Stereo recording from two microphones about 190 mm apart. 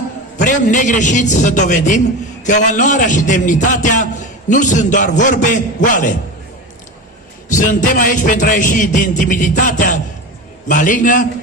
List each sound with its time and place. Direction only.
0.4 s a man's voice: 40° left (ahead or behind)
7.4 s music: 40° left (ahead or behind)